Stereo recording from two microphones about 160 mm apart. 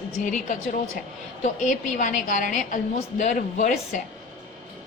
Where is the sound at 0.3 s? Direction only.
50° left (ahead or behind).